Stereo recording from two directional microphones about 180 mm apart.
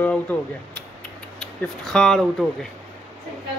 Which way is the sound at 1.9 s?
5° left (ahead or behind).